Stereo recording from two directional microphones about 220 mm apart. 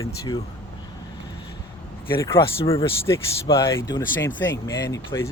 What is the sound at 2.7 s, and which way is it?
Speech, 25° left (ahead or behind).